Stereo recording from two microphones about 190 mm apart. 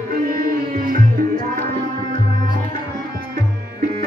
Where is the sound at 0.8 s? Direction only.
45° right (ahead or behind).